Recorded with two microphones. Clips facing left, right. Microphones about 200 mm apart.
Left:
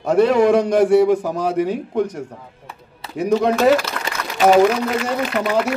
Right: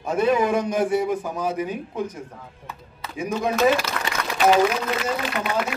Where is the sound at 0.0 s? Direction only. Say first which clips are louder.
Left 6 dB; 75° left (ahead or behind).